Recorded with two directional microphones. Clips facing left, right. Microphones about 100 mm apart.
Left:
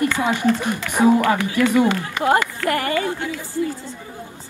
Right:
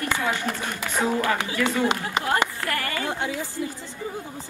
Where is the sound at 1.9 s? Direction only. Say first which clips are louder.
Left 6 dB; 20° right (ahead or behind).